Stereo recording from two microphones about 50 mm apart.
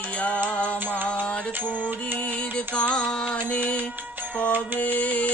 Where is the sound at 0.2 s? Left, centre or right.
Left; by 3.3 s centre.